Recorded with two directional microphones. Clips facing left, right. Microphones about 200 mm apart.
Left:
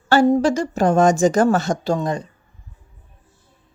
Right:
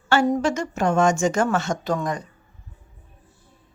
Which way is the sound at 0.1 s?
30° left (ahead or behind).